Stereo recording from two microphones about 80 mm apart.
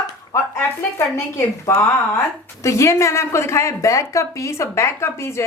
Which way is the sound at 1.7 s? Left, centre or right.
Left.